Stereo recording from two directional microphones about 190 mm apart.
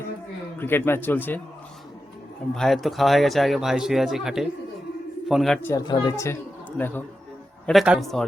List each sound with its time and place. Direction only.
0.6 s speech: 10° left (ahead or behind)
2.6 s speech: centre (ahead or behind)
5.6 s speech: 20° left (ahead or behind)
7.7 s speech: centre (ahead or behind)